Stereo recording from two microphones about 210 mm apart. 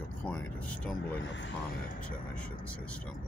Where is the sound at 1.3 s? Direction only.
60° left (ahead or behind).